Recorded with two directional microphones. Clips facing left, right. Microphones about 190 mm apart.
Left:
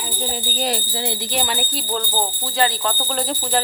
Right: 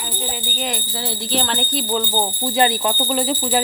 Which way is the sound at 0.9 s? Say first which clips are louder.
Right 1 dB; 15° left (ahead or behind).